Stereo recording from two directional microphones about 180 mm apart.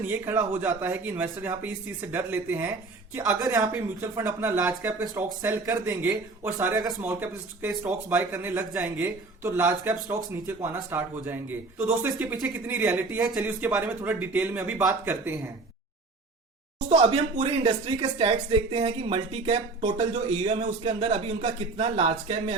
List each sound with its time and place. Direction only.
0.1 s a man's voice: 15° right (ahead or behind)
16.9 s speech: 40° right (ahead or behind)